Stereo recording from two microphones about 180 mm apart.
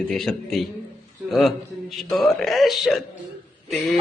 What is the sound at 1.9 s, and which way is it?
A man's voice, centre (ahead or behind).